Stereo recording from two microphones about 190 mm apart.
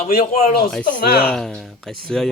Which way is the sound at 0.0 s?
50° left (ahead or behind).